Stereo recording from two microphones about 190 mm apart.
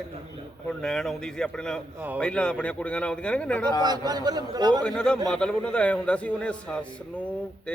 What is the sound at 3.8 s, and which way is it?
A man's voice, 20° right (ahead or behind).